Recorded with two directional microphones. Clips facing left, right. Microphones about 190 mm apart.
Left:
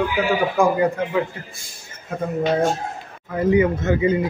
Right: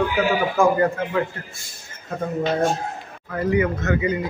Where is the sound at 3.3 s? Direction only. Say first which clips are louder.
Left 3 dB; 20° left (ahead or behind).